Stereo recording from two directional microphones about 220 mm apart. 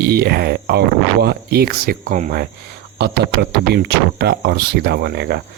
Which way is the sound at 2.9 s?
50° right (ahead or behind).